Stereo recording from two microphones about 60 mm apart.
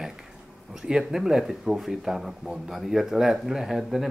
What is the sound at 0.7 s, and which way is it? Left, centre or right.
Speech, centre.